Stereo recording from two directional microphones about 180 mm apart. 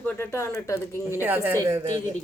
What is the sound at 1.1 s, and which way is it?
Speech, 10° right (ahead or behind).